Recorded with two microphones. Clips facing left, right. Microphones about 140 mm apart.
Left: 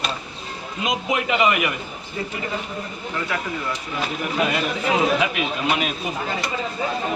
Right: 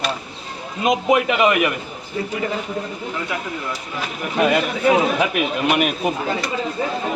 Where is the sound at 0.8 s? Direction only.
50° right (ahead or behind).